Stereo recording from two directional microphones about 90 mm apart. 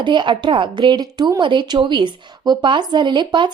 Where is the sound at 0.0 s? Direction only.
60° right (ahead or behind).